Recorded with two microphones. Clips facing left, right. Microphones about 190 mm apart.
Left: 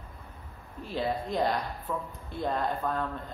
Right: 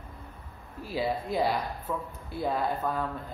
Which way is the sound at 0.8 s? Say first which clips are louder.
Right 1 dB; 5° right (ahead or behind).